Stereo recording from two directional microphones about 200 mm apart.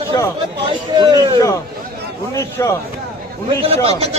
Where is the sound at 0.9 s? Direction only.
20° right (ahead or behind).